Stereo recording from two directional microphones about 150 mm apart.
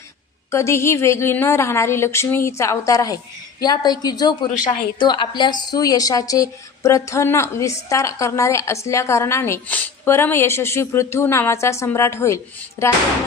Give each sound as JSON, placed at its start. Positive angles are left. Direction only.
{"t": 0.5, "sound": "a woman's voice", "side_deg": 20}